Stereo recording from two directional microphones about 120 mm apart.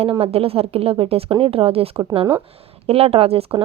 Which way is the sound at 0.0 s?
55° right (ahead or behind).